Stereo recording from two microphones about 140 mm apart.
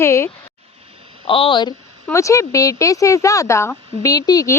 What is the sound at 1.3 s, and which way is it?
Speech, 40° left (ahead or behind).